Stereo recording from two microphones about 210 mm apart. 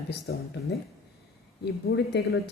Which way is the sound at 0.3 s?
50° left (ahead or behind).